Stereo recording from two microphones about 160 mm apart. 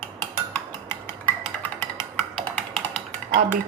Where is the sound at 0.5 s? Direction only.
15° left (ahead or behind).